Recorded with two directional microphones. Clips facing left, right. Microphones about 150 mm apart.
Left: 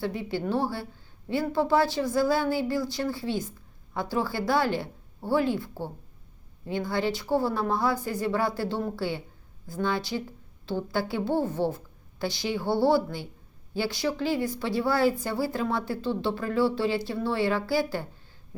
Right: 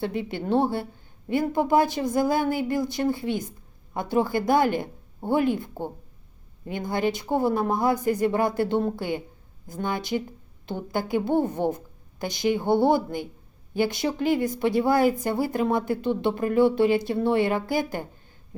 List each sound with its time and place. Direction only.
0.0 s speech: 20° right (ahead or behind)